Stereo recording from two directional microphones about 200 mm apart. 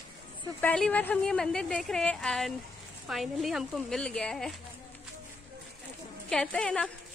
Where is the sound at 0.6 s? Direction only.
5° left (ahead or behind).